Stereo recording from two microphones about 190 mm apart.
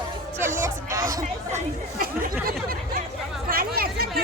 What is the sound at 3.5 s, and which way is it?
Chatter, 50° right (ahead or behind).